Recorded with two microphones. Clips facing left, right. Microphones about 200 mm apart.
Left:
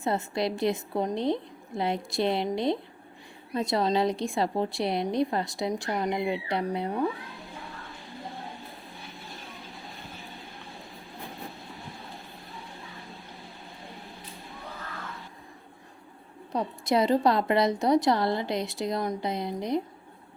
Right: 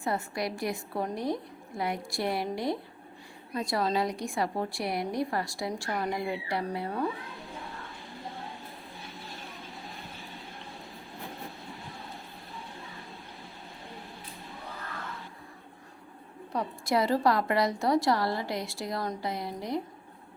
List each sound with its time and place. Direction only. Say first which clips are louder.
0.0 s a woman's voice: left 4 dB; 25° left (ahead or behind)
16.5 s a woman's voice: left 3 dB; 20° left (ahead or behind)